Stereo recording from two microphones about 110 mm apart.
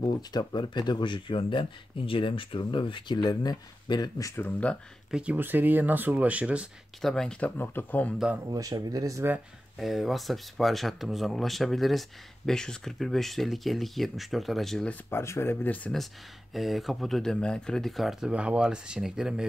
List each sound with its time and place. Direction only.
0.0 s speech: 40° left (ahead or behind)
4.4 s speech: 15° left (ahead or behind)
5.1 s speech: 15° right (ahead or behind)
7.0 s speech: 5° left (ahead or behind)
8.5 s speech: 35° right (ahead or behind)
9.8 s speech: centre (ahead or behind)
15.0 s speech: 25° left (ahead or behind)
16.5 s speech: centre (ahead or behind)